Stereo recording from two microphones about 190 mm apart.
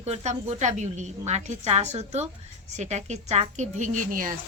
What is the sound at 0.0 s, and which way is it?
A woman's voice, 35° right (ahead or behind).